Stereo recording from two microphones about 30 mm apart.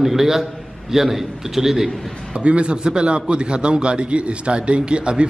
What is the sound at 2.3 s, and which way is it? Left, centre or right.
Speech, right.